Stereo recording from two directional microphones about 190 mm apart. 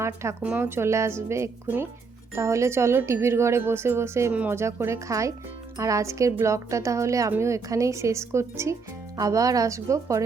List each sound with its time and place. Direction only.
0.0 s speech: 15° right (ahead or behind)